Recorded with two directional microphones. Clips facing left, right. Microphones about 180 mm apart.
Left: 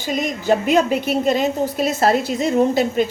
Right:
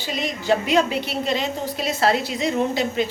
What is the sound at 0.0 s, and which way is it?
A woman's voice, 45° left (ahead or behind).